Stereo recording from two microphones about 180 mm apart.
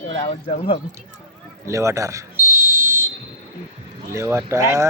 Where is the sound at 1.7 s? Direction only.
15° right (ahead or behind).